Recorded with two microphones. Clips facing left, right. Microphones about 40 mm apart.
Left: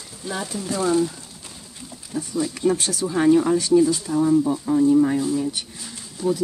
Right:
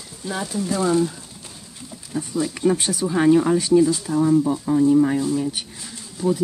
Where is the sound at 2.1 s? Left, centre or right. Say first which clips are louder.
Right 1 dB; centre.